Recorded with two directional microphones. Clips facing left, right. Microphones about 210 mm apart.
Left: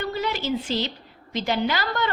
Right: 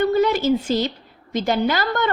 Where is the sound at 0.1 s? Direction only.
50° right (ahead or behind).